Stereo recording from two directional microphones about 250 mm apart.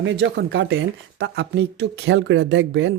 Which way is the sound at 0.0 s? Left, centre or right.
Right.